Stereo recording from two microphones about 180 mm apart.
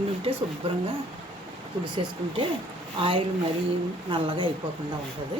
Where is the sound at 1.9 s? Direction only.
25° right (ahead or behind).